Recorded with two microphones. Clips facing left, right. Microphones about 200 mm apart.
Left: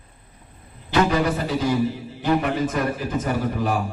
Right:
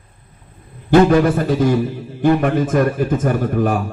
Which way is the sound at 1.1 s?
50° right (ahead or behind).